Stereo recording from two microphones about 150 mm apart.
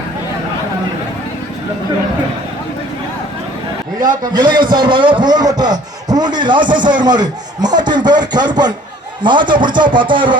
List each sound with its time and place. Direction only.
4.0 s speech: 25° right (ahead or behind)